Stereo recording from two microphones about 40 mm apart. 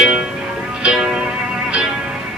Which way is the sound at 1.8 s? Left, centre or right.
Centre.